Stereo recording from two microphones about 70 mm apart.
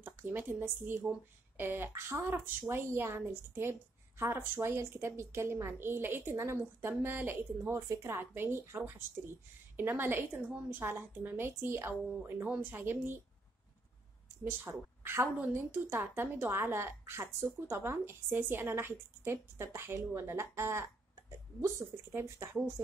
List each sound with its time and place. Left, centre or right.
0.0 s a woman's voice: right
7.7 s a woman's voice: right
14.4 s a woman's voice: right